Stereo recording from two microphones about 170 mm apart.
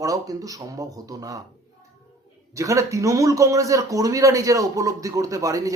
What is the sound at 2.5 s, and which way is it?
Speech, 20° right (ahead or behind).